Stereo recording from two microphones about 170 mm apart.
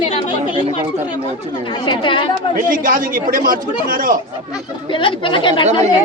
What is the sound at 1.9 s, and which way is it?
Speech, 30° left (ahead or behind).